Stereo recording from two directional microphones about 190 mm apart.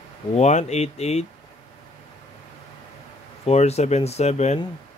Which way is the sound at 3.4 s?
35° left (ahead or behind).